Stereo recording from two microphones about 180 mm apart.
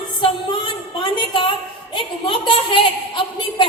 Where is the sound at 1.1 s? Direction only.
30° left (ahead or behind).